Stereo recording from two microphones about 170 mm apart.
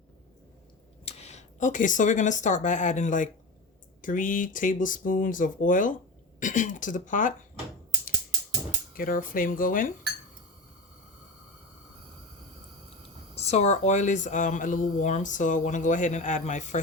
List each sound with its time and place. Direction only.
1.0 s speech: 40° left (ahead or behind)
9.0 s speech: 55° left (ahead or behind)
13.3 s speech: 40° left (ahead or behind)